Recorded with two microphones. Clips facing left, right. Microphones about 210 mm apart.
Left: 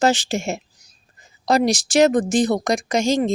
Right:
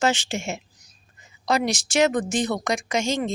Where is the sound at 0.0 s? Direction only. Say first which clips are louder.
Left 5 dB; 35° left (ahead or behind).